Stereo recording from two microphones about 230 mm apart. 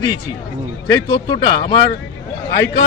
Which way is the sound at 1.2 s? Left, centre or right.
Left.